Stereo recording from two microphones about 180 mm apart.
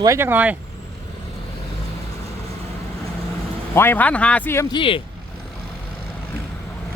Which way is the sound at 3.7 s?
10° left (ahead or behind).